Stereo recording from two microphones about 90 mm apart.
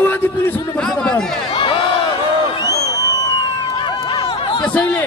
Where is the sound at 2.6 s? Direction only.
40° left (ahead or behind).